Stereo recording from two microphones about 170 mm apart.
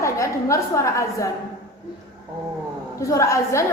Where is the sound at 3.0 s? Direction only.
20° left (ahead or behind).